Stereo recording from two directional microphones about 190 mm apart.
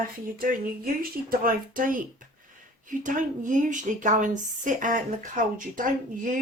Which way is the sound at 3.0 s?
40° right (ahead or behind).